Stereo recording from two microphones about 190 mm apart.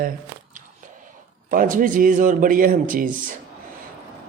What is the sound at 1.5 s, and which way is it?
Speech, 45° right (ahead or behind).